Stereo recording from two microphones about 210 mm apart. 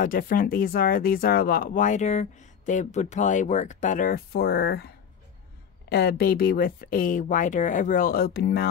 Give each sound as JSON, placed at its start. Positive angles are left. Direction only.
{"t": 0.0, "sound": "speech", "side_deg": 40}
{"t": 5.9, "sound": "speech", "side_deg": 50}